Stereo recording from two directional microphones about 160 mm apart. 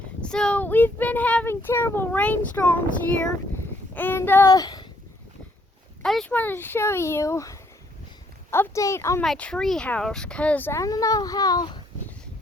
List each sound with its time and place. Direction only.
0.2 s speech: 5° left (ahead or behind); by 4.9 s 25° left (ahead or behind)
6.0 s speech: 5° left (ahead or behind)
9.2 s speech: 5° left (ahead or behind); by 11.8 s 25° left (ahead or behind)